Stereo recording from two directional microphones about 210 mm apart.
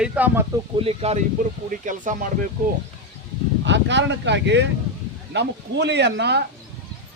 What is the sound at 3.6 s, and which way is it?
Speech, 55° right (ahead or behind).